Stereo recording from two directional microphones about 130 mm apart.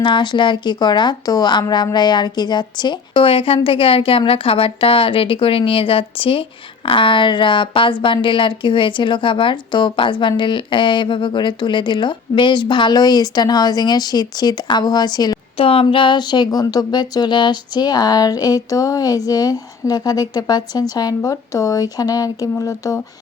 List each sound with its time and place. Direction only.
0.0 s speech: 35° left (ahead or behind)
15.5 s speech: 45° left (ahead or behind); by 23.0 s 25° left (ahead or behind)